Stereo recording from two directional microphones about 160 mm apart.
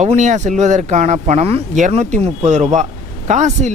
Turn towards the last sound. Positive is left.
turn(degrees=-50)  # may be behind; listen again after turning